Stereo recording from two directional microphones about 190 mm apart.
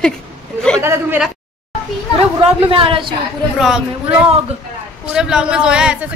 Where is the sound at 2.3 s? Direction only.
25° right (ahead or behind).